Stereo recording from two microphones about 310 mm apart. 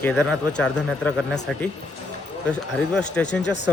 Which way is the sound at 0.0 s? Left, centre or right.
Centre.